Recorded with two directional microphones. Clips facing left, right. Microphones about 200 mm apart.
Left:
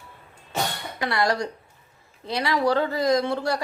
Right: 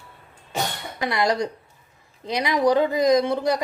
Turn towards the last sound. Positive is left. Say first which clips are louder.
# right 3 dB
turn(degrees=-20)  # may be behind; listen again after turning